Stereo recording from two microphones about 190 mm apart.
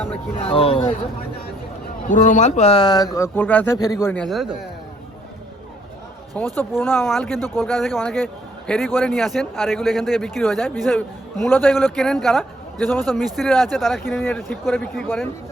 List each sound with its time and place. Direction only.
0.1 s speech: 30° left (ahead or behind)
2.0 s speech: 40° left (ahead or behind); by 3.1 s 20° left (ahead or behind)
3.2 s a man's voice: 10° left (ahead or behind)
6.6 s speech: 10° left (ahead or behind)
7.6 s a man's voice: centre (ahead or behind)